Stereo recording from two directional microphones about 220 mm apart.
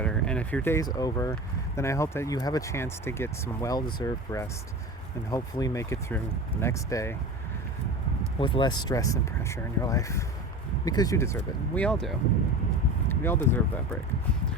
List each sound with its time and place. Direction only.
0.0 s speech: 5° left (ahead or behind)
8.4 s speech: 20° left (ahead or behind)